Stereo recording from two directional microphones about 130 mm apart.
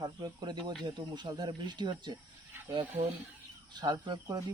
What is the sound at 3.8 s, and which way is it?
Speech, 35° right (ahead or behind).